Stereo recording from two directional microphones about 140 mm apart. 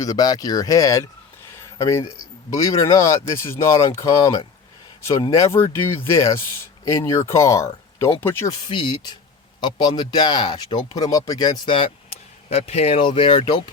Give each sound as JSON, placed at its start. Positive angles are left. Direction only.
{"t": 0.0, "sound": "speech", "side_deg": 25}
{"t": 8.7, "sound": "speech", "side_deg": 35}